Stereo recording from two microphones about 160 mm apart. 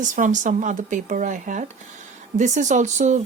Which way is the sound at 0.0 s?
50° right (ahead or behind).